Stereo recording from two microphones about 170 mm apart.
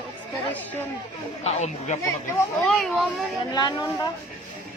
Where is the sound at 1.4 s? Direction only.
40° left (ahead or behind).